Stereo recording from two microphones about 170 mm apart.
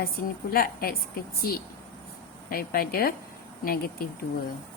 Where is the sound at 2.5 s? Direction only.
60° left (ahead or behind).